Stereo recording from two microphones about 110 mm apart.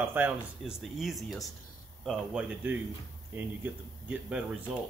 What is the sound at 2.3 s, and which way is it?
Speech, 10° right (ahead or behind).